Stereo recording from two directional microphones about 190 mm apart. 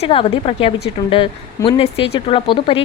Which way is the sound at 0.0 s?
30° left (ahead or behind).